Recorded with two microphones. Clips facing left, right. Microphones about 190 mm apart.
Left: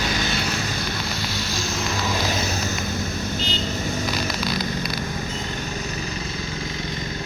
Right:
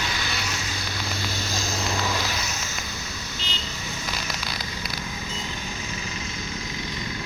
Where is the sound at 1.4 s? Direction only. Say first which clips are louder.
Left 2 dB; 45° right (ahead or behind).